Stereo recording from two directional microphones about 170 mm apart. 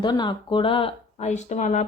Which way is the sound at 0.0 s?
25° left (ahead or behind).